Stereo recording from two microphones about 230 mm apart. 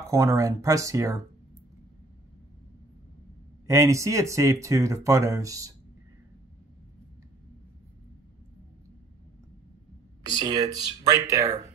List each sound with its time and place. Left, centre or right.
0.0 s speech: centre
3.6 s speech: centre
10.4 s speech: centre